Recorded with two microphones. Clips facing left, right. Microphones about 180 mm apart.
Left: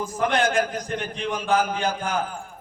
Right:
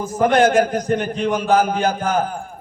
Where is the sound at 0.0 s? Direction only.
45° right (ahead or behind).